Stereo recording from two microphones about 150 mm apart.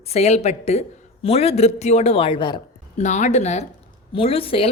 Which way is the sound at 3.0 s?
50° left (ahead or behind).